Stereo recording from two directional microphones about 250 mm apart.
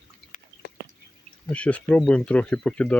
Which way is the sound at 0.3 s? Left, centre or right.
Left.